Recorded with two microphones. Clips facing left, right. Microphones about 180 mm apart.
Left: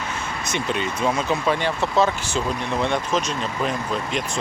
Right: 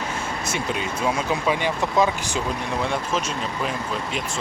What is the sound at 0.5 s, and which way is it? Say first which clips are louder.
Speech: left 3 dB; 5° right (ahead or behind).